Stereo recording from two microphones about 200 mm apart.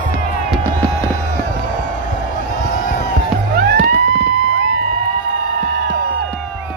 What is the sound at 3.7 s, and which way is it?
Music, 45° right (ahead or behind).